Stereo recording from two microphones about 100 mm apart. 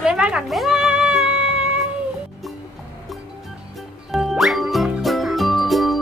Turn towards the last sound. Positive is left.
turn(degrees=0)  # may be behind; listen again after turning